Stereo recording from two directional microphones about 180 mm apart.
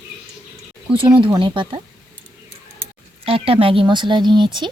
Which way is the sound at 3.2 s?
30° right (ahead or behind).